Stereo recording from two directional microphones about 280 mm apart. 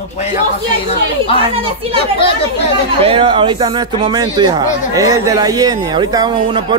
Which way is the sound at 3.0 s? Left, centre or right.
Centre.